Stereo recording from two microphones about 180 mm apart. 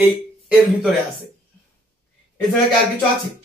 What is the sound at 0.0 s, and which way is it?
Speech, 5° right (ahead or behind).